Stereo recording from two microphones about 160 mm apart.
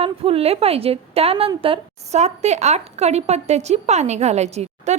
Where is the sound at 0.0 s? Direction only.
35° right (ahead or behind).